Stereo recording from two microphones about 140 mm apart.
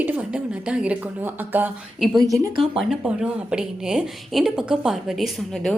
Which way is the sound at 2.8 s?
5° right (ahead or behind).